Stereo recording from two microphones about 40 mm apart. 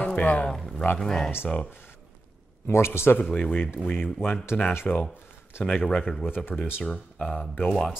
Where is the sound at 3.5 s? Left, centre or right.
Left.